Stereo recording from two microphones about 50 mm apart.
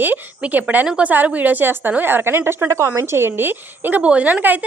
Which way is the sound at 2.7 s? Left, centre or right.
Right.